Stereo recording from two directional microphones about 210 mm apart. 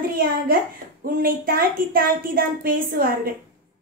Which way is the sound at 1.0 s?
45° right (ahead or behind).